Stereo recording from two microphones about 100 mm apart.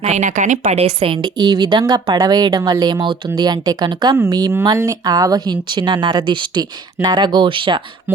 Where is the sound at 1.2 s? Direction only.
45° right (ahead or behind).